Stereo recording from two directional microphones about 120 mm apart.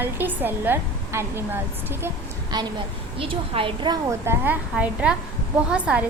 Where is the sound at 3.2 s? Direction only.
50° right (ahead or behind).